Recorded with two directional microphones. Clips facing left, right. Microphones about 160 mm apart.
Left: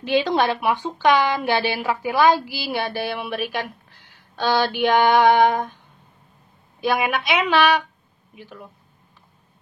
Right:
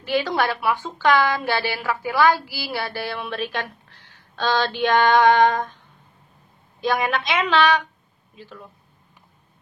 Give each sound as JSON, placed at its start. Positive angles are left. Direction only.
{"t": 0.0, "sound": "speech", "side_deg": 20}
{"t": 6.8, "sound": "speech", "side_deg": 10}